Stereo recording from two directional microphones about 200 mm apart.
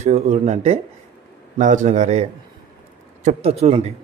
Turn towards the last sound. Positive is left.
turn(degrees=-30)  # may be behind; listen again after turning